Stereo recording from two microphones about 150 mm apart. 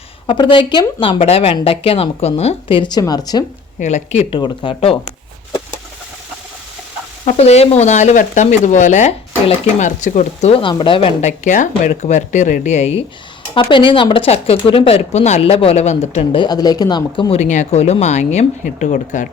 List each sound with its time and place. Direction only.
0.3 s speech: 35° left (ahead or behind)
3.8 s speech: 50° left (ahead or behind)
4.3 s speech: 30° left (ahead or behind)
7.3 s speech: 45° left (ahead or behind)
10.5 s speech: 35° left (ahead or behind)
11.2 s speech: 55° left (ahead or behind)
13.5 s speech: 35° left (ahead or behind)
16.4 s speech: 25° left (ahead or behind)
17.3 s speech: 55° left (ahead or behind)